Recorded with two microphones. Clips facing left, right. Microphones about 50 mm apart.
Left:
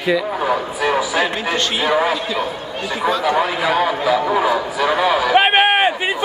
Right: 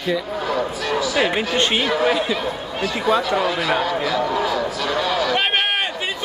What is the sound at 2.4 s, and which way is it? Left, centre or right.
Chatter, centre.